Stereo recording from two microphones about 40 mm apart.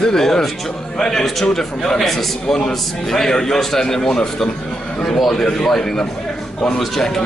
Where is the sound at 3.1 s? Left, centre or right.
Centre.